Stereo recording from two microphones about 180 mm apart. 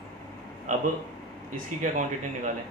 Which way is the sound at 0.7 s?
45° right (ahead or behind).